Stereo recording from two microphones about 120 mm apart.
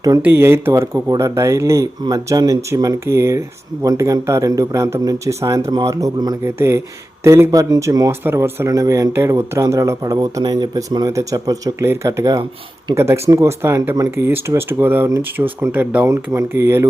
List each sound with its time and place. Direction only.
0.2 s speech: 20° right (ahead or behind)
16.0 s speech: 25° right (ahead or behind)